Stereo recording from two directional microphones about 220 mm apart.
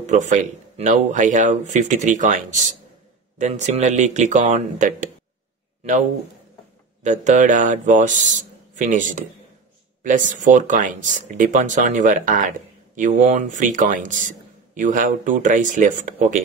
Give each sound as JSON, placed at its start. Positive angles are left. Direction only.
{"t": 0.0, "sound": "speech", "side_deg": -35}
{"t": 3.3, "sound": "speech", "side_deg": -30}
{"t": 7.0, "sound": "speech", "side_deg": -35}